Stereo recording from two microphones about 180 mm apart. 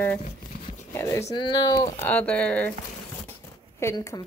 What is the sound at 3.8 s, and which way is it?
Speech, 15° left (ahead or behind).